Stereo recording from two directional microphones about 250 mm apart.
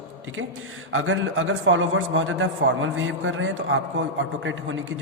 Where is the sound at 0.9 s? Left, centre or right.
Right.